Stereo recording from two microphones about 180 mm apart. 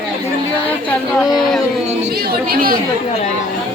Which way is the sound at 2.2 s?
55° right (ahead or behind).